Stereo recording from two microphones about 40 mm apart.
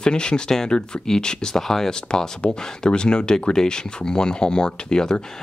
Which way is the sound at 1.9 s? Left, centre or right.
Centre.